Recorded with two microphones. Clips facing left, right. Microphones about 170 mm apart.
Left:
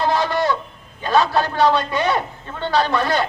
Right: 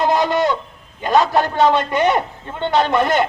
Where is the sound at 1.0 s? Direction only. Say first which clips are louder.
Right 2 dB; 20° right (ahead or behind).